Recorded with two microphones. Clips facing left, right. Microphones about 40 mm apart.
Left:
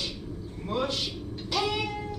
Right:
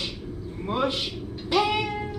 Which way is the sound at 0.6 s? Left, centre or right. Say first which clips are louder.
Right 4 dB; right.